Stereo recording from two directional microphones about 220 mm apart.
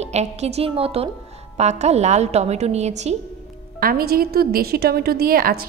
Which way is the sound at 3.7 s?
40° right (ahead or behind).